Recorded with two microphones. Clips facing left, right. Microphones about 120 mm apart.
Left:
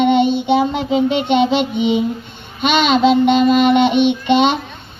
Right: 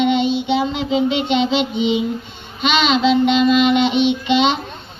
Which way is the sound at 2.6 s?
50° left (ahead or behind).